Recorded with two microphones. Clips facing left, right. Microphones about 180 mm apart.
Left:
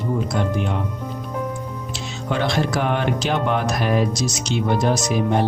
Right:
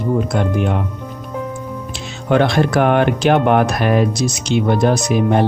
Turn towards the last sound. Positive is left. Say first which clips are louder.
# right 4 dB
turn(degrees=-60)  # may be behind; listen again after turning